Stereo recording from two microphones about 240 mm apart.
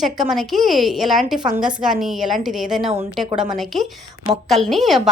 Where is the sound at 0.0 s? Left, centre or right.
Centre.